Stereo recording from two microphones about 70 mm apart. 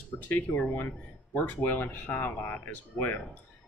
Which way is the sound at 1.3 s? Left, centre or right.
Left.